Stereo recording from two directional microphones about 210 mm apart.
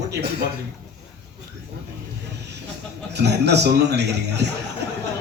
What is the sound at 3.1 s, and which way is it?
A man's voice, 55° right (ahead or behind).